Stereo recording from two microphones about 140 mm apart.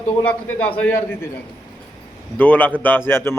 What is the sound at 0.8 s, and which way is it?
Speech, 15° left (ahead or behind).